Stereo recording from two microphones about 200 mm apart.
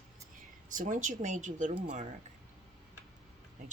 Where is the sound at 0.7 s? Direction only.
40° right (ahead or behind).